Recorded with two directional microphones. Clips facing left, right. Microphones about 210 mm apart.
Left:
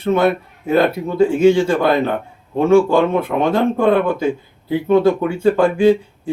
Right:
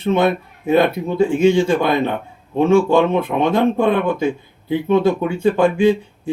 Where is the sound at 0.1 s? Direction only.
20° right (ahead or behind).